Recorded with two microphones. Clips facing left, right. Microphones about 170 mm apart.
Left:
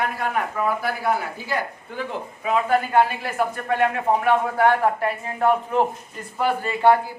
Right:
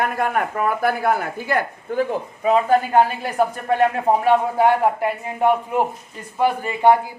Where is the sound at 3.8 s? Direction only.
30° right (ahead or behind).